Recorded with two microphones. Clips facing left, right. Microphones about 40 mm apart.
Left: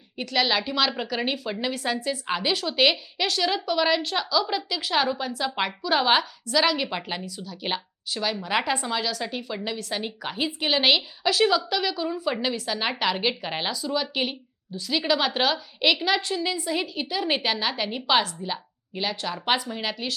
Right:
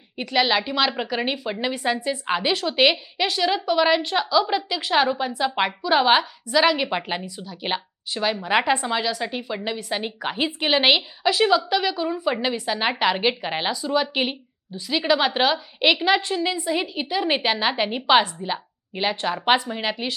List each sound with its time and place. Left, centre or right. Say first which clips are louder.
0.2 s a woman's voice: right 3 dB; centre